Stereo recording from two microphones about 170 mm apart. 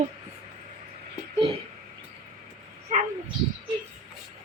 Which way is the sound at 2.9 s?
45° right (ahead or behind).